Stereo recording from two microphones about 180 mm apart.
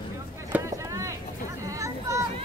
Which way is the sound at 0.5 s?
15° right (ahead or behind).